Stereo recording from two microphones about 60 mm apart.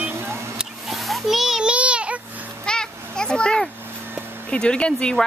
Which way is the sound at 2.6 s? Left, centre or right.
Centre.